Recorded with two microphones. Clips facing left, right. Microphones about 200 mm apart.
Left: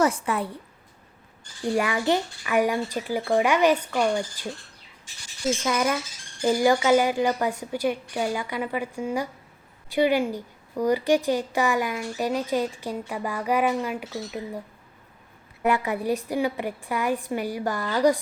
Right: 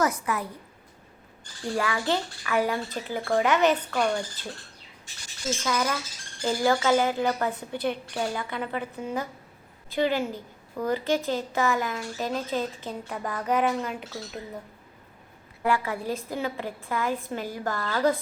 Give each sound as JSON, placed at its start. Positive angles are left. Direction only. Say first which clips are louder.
{"t": 0.0, "sound": "a woman's voice", "louder": "left 3 dB", "side_deg": 30}
{"t": 1.7, "sound": "a woman's voice", "louder": "left 3 dB", "side_deg": 15}
{"t": 5.6, "sound": "a woman's voice", "louder": "even", "side_deg": 15}
{"t": 15.6, "sound": "a woman's voice", "louder": "left 3 dB", "side_deg": 20}